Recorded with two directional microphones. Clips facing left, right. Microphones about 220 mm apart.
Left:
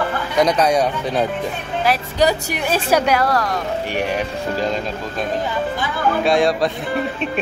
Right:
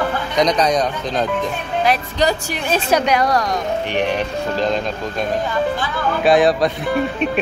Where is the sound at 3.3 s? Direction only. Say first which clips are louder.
Right 1 dB; 20° right (ahead or behind).